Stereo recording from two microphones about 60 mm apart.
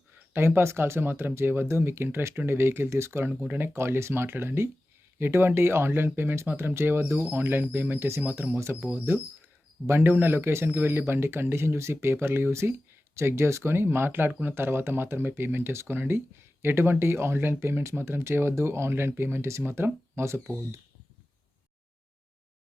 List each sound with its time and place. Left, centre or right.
0.3 s a man's voice: right
8.2 s a man's voice: right
8.5 s speech: right
9.8 s a man's voice: right